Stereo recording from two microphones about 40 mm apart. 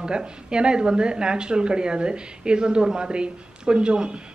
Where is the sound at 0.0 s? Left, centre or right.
Right.